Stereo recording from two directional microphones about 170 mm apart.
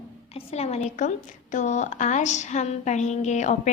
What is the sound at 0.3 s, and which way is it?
A woman's voice, 40° left (ahead or behind).